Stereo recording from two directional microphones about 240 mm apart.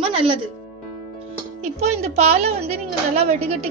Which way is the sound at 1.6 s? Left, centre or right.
Right.